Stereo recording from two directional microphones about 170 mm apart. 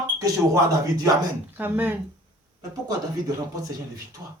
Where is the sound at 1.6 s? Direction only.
10° right (ahead or behind).